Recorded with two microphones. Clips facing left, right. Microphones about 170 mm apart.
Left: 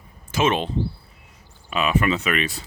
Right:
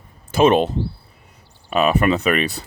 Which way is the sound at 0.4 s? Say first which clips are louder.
Right 7 dB; 40° right (ahead or behind).